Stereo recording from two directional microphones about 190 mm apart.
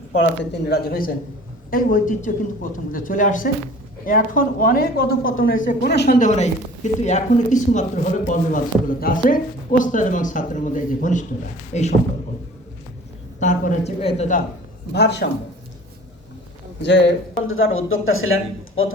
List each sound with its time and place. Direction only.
0.5 s speech: 60° left (ahead or behind)
6.1 s speech: 40° left (ahead or behind)
13.4 s speech: 40° left (ahead or behind)
14.9 s speech: 65° left (ahead or behind)
16.8 s speech: 70° left (ahead or behind); by 18.3 s 90° left